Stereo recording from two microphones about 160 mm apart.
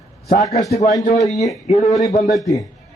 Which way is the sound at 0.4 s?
20° left (ahead or behind).